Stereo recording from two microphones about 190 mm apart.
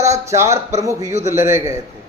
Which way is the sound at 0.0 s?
15° right (ahead or behind).